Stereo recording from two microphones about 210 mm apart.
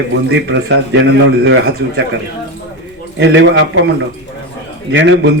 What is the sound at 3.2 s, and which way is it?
A man's voice, 60° right (ahead or behind).